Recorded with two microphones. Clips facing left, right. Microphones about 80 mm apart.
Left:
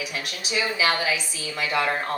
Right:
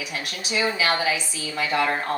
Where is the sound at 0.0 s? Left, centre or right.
Right.